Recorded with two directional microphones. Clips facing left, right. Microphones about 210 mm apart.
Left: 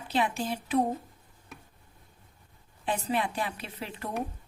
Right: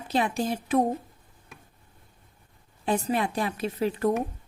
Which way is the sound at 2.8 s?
40° right (ahead or behind).